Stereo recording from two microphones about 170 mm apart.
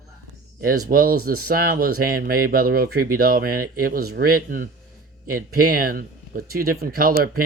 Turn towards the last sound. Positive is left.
turn(degrees=-60)  # may be behind; listen again after turning